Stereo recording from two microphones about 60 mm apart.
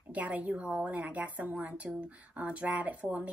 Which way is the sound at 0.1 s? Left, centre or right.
Right.